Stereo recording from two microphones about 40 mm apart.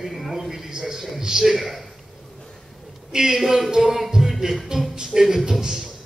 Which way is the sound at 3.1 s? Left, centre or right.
Centre.